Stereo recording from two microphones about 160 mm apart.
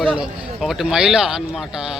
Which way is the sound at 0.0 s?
5° right (ahead or behind).